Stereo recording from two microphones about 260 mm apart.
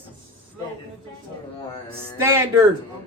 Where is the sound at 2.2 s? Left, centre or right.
Centre.